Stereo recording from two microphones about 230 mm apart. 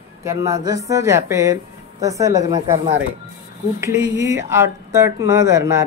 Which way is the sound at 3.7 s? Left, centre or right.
Centre.